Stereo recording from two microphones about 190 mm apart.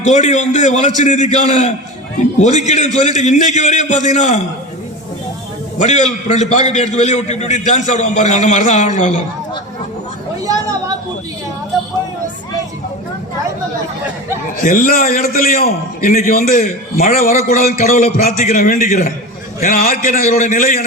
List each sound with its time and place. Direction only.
0.0 s a man's voice: 40° left (ahead or behind)
5.8 s a man's voice: 40° left (ahead or behind)
10.4 s a sound: 20° right (ahead or behind)
14.6 s a man's voice: 45° left (ahead or behind)